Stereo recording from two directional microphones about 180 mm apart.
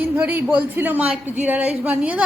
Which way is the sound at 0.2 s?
5° right (ahead or behind).